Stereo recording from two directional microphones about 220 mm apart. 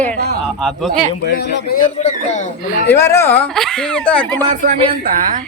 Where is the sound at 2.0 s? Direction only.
30° left (ahead or behind).